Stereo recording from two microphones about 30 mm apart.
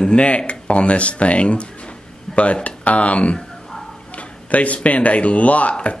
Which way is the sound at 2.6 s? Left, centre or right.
Left.